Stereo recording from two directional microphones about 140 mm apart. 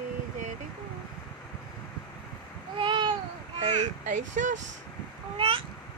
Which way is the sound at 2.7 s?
35° right (ahead or behind).